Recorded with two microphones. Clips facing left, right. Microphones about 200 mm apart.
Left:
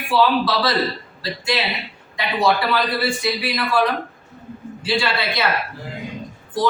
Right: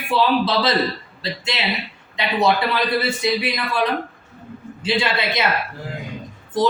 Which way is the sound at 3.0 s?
20° right (ahead or behind).